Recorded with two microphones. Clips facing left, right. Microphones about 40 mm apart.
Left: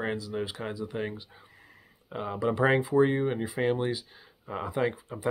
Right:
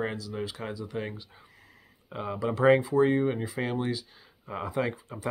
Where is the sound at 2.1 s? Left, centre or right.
Centre.